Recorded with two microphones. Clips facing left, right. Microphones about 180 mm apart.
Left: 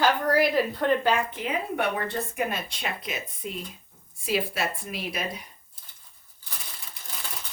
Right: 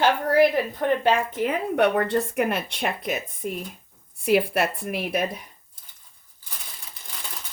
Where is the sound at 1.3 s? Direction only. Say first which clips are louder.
Right 5 dB; 55° right (ahead or behind).